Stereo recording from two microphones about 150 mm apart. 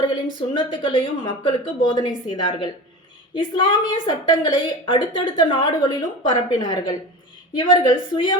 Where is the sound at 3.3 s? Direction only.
30° left (ahead or behind).